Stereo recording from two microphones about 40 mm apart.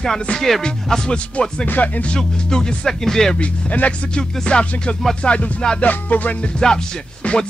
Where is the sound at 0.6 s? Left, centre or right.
Centre.